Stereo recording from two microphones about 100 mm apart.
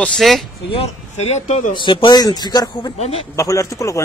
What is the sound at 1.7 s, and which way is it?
Speech, 55° left (ahead or behind).